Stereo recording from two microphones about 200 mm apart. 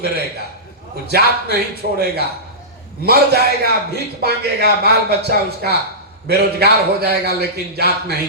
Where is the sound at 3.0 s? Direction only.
55° right (ahead or behind).